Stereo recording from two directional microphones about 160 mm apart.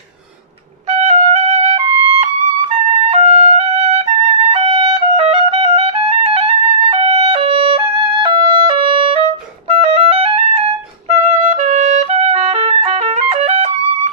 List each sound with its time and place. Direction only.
0.9 s music: 45° right (ahead or behind)
11.7 s music: 45° right (ahead or behind)